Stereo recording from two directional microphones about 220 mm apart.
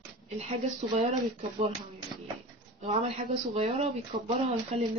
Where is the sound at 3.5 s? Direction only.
25° right (ahead or behind).